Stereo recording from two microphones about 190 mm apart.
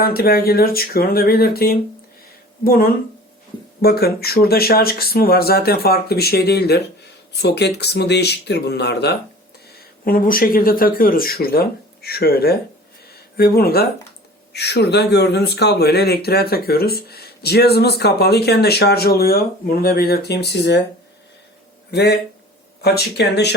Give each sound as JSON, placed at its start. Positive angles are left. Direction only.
{"t": 0.0, "sound": "speech", "side_deg": 50}
{"t": 9.7, "sound": "speech", "side_deg": 50}
{"t": 21.9, "sound": "speech", "side_deg": 55}